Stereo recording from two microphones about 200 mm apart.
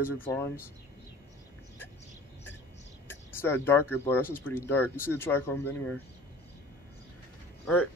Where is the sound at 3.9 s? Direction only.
10° left (ahead or behind).